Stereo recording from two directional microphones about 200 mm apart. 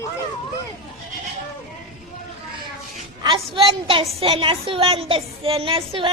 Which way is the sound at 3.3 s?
25° right (ahead or behind).